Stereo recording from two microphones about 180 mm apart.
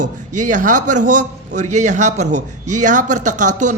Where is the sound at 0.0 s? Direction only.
45° right (ahead or behind).